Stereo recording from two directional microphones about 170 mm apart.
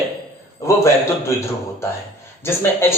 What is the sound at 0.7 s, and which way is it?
Speech, 15° left (ahead or behind).